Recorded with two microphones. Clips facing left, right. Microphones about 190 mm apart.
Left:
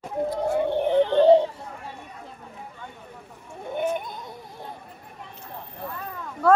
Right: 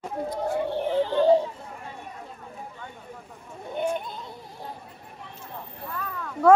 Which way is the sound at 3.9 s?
15° left (ahead or behind).